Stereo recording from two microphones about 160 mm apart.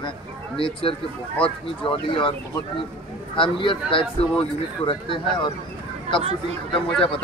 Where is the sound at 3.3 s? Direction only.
30° left (ahead or behind).